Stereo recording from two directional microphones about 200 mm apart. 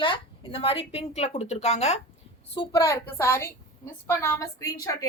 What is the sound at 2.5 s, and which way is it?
A woman's voice, 20° left (ahead or behind).